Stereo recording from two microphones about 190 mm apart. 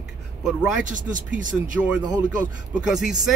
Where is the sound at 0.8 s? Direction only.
45° right (ahead or behind).